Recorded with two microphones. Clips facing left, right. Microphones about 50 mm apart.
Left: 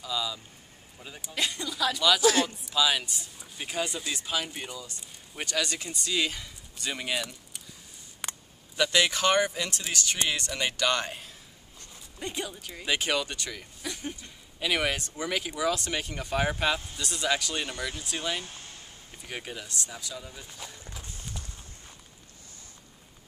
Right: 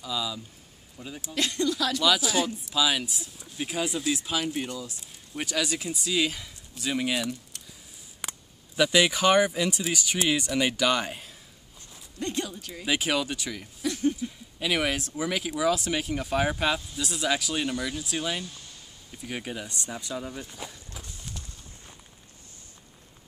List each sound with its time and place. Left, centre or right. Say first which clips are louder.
0.0 s speech: right 1 dB; centre
19.7 s speech: right 4 dB; right
21.3 s clip-clop: even; centre